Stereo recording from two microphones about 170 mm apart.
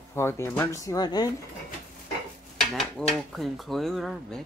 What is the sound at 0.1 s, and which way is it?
Speech, 15° left (ahead or behind).